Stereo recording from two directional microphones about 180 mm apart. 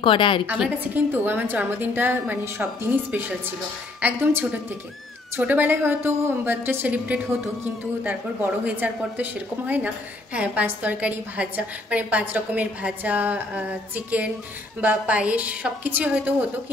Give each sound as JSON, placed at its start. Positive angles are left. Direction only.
{"t": 0.0, "sound": "a woman's voice", "side_deg": 30}
{"t": 0.5, "sound": "a woman's voice", "side_deg": -10}